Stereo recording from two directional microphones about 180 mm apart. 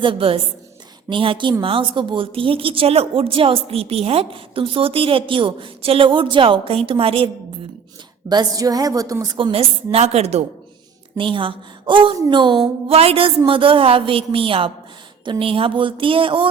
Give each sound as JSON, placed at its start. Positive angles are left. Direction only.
{"t": 0.0, "sound": "a woman's voice", "side_deg": -30}
{"t": 8.3, "sound": "a woman's voice", "side_deg": -20}